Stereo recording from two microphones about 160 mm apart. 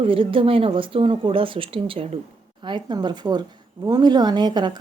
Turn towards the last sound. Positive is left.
turn(degrees=-30)  # may be behind; listen again after turning